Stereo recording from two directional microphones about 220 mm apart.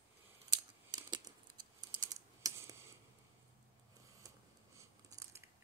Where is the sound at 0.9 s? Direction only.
20° right (ahead or behind).